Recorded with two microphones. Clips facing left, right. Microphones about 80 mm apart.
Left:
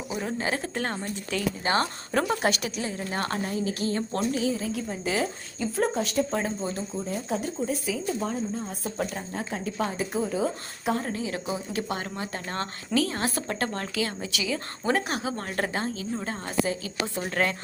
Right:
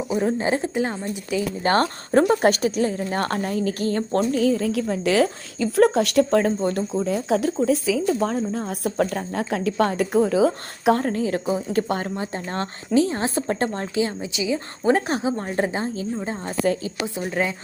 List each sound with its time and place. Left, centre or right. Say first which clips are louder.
0.1 s speech: right 7 dB; right
0.7 s speech: right 6 dB; centre
1.6 s a woman's voice: right 8 dB; right
4.7 s a woman's voice: right 8 dB; right
11.0 s a woman's voice: right 8 dB; right
12.1 s speech: right 5 dB; right; by 17.5 s centre